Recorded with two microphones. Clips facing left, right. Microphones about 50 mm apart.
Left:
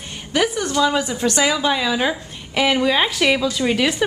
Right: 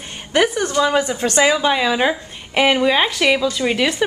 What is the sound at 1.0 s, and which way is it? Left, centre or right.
Speech, right.